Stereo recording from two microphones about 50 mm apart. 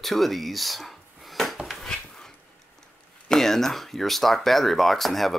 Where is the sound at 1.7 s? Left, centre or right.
Centre.